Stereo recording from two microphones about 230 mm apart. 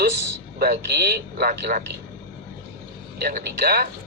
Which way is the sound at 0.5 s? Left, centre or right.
Right.